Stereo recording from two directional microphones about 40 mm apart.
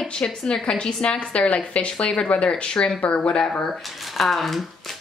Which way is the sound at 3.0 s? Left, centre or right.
Left.